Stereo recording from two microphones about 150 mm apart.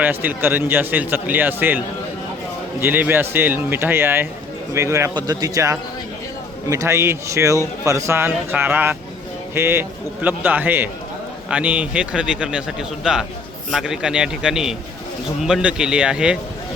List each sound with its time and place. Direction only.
0.0 s speech: 10° right (ahead or behind)
2.8 s a man's voice: 15° right (ahead or behind)